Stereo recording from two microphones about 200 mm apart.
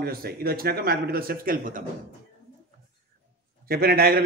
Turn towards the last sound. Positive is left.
turn(degrees=-50)  # may be behind; listen again after turning